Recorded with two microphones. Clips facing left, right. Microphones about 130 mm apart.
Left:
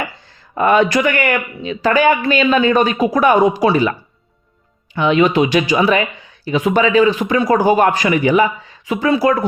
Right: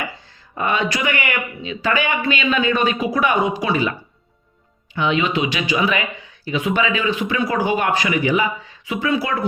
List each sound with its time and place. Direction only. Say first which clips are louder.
0.5 s speech: left 8 dB; 50° left (ahead or behind)
4.9 s speech: left 6 dB; 45° left (ahead or behind)